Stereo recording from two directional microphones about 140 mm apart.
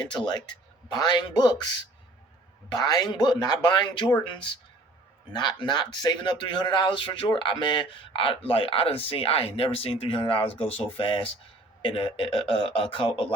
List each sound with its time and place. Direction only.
0.0 s speech: 30° left (ahead or behind)